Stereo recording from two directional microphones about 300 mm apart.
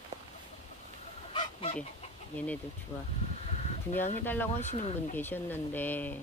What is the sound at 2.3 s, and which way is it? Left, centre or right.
Speech, centre.